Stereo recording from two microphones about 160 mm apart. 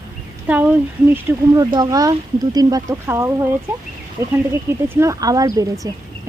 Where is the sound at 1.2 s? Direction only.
20° right (ahead or behind).